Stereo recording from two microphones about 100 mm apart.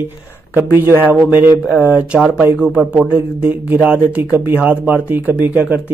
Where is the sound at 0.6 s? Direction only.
20° right (ahead or behind).